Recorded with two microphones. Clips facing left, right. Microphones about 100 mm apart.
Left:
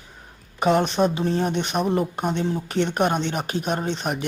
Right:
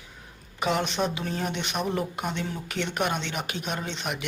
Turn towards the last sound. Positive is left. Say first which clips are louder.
# left 6 dB
turn(degrees=40)  # may be behind; listen again after turning